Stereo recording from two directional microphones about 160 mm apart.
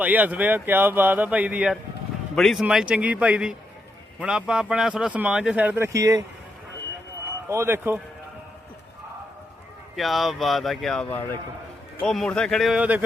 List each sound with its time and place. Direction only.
0.0 s speech: 10° right (ahead or behind)
7.4 s speech: 15° right (ahead or behind)
9.9 s speech: centre (ahead or behind)